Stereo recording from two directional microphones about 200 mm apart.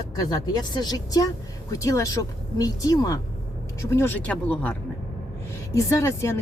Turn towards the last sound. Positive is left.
turn(degrees=15)  # may be behind; listen again after turning